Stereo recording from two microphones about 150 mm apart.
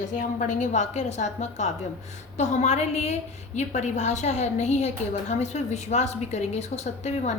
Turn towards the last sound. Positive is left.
turn(degrees=45)  # may be behind; listen again after turning